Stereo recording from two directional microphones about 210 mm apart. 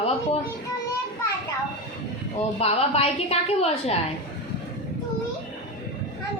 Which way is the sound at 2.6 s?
30° left (ahead or behind).